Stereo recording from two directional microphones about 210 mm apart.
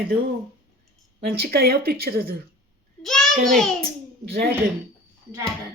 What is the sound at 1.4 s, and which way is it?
Speech, 50° right (ahead or behind).